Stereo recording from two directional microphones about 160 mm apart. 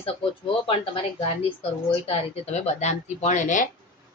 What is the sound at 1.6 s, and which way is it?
A woman's voice, 40° left (ahead or behind).